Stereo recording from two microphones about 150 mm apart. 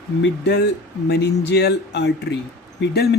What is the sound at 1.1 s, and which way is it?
Speech, 90° left.